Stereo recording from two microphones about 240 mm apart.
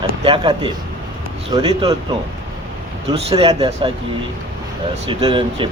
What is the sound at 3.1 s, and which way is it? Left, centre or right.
Speech, right.